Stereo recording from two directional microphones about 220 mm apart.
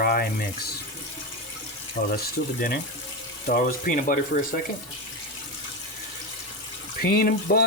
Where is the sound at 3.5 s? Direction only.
40° left (ahead or behind).